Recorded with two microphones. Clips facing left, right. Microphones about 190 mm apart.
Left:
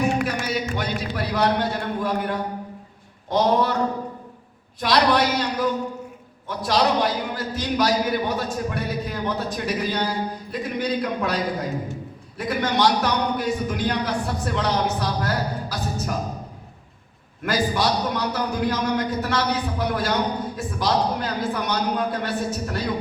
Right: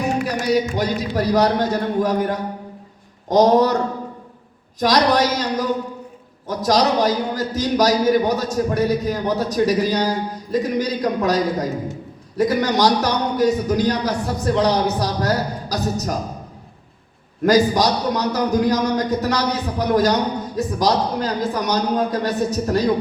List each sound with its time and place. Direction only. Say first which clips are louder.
0.3 s a man's voice: right 6 dB; 40° right (ahead or behind)
4.8 s a man's voice: right 3 dB; 40° right (ahead or behind)
17.4 s a man's voice: right 7 dB; 40° right (ahead or behind)